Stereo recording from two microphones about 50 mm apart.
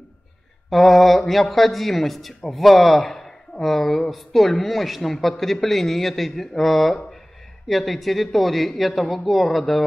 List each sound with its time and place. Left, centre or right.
0.7 s speech: centre